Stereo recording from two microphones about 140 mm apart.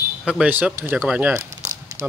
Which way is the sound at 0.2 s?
Centre (ahead or behind).